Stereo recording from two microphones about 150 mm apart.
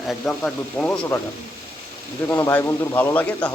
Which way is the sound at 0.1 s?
5° left (ahead or behind).